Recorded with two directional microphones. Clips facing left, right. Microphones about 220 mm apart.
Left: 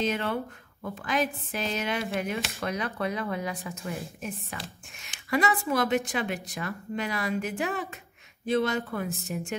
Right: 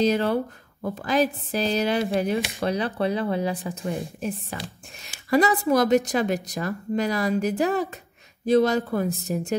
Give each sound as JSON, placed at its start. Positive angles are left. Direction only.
{"t": 0.0, "sound": "speech", "side_deg": -35}